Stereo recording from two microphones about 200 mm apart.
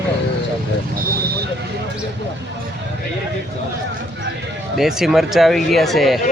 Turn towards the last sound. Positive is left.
turn(degrees=0)  # may be behind; listen again after turning